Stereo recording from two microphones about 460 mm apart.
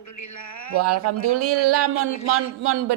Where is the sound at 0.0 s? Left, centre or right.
Left.